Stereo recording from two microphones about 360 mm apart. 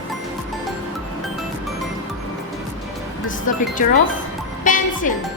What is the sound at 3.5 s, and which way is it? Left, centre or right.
Music, left.